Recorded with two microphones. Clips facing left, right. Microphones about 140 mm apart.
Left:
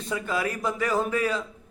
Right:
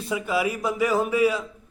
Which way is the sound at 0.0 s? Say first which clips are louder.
Right 3 dB; 10° right (ahead or behind).